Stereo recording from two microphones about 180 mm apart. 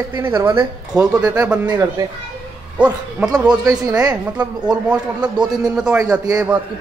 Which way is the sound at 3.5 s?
20° right (ahead or behind).